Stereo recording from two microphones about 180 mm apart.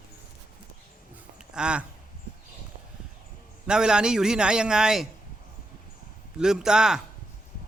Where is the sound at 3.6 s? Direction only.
5° right (ahead or behind).